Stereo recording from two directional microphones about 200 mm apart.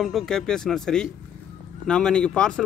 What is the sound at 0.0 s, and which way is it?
A man's voice, centre (ahead or behind).